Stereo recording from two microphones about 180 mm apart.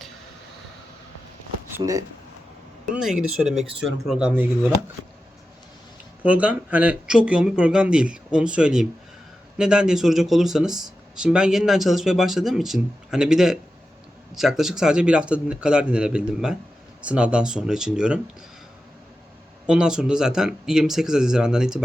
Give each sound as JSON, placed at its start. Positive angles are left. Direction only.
{"t": 1.7, "sound": "speech", "side_deg": -20}
{"t": 2.9, "sound": "speech", "side_deg": -5}
{"t": 6.2, "sound": "speech", "side_deg": -10}
{"t": 19.6, "sound": "speech", "side_deg": -5}